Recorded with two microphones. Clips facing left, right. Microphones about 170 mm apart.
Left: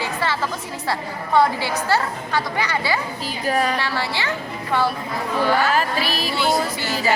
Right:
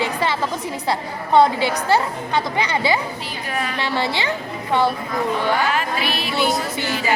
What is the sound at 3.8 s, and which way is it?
A woman's voice, 20° right (ahead or behind).